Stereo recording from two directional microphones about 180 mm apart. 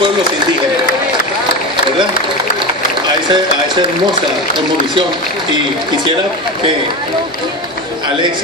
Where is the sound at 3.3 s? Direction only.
25° right (ahead or behind).